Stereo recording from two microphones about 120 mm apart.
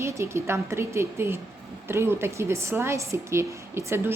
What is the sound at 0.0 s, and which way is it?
A woman's voice, 25° right (ahead or behind).